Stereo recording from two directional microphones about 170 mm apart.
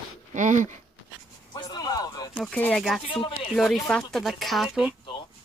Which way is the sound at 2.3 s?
5° left (ahead or behind).